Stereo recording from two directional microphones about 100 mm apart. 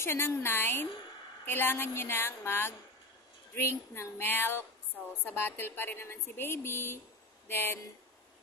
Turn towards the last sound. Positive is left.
turn(degrees=25)  # may be behind; listen again after turning